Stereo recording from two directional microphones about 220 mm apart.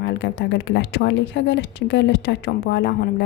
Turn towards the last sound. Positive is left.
turn(degrees=50)  # may be behind; listen again after turning